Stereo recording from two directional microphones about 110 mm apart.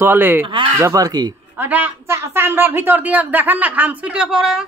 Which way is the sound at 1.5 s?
15° right (ahead or behind).